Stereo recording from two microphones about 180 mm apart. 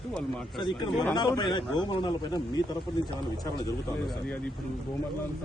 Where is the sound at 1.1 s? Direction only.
25° left (ahead or behind).